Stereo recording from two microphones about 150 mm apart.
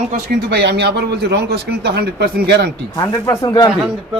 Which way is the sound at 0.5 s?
90° right.